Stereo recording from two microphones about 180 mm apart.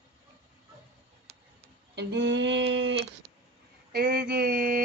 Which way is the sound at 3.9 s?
65° right (ahead or behind).